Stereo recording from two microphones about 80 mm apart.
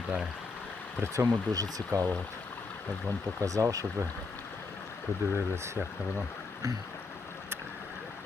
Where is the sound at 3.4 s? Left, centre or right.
Right.